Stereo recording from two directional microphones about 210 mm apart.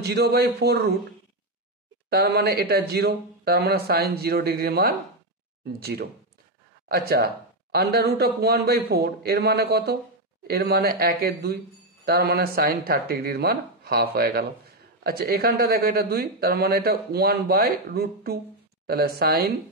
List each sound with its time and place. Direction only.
0.0 s speech: 50° right (ahead or behind)
2.0 s speech: 50° right (ahead or behind)